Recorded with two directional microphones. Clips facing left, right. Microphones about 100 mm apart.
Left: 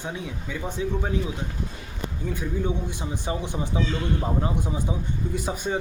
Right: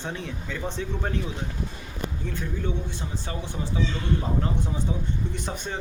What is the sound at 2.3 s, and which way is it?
A man's voice, 15° left (ahead or behind).